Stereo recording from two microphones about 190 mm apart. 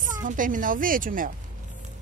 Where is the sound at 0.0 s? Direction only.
45° right (ahead or behind).